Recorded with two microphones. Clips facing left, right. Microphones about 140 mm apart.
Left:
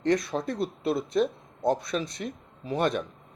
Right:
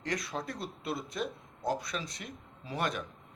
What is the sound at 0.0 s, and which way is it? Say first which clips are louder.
Speech: left 10 dB; 25° left (ahead or behind).